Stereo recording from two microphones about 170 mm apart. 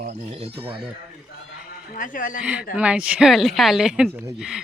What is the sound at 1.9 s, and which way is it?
Speech, 50° left (ahead or behind).